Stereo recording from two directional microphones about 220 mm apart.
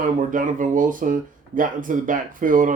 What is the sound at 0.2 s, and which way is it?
Speech, 35° right (ahead or behind).